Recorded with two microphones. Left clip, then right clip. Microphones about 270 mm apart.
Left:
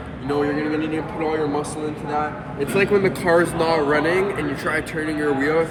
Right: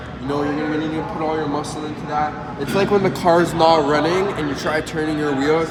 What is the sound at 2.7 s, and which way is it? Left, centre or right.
Speech, centre.